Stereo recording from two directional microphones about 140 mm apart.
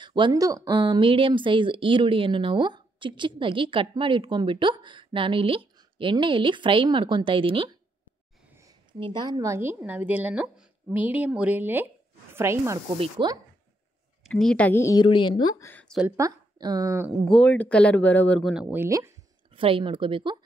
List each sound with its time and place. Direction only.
0.0 s speech: 35° right (ahead or behind)
9.0 s speech: 30° right (ahead or behind)
12.9 s speech: 40° right (ahead or behind)
14.3 s speech: 5° left (ahead or behind)
15.0 s a woman's voice: 35° left (ahead or behind)
15.6 s speech: 10° left (ahead or behind)
16.2 s speech: 25° right (ahead or behind)
17.3 s speech: 10° left (ahead or behind)
18.4 s speech: 5° right (ahead or behind); by 19.1 s 20° right (ahead or behind)
19.5 s speech: 40° right (ahead or behind)